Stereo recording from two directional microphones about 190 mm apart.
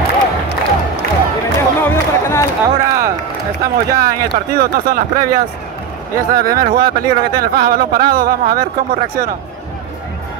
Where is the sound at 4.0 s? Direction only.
50° right (ahead or behind).